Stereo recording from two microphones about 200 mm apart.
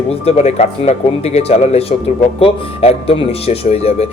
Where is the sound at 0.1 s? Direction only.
35° left (ahead or behind).